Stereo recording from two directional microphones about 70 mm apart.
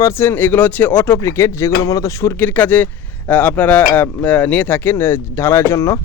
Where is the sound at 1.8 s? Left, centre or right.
Left.